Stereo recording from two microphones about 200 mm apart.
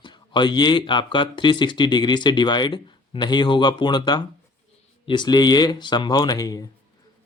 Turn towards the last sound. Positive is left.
turn(degrees=20)  # may be behind; listen again after turning